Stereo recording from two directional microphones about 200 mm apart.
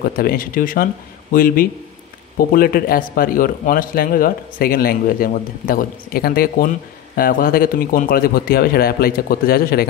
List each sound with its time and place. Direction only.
0.0 s a man's voice: 50° left (ahead or behind)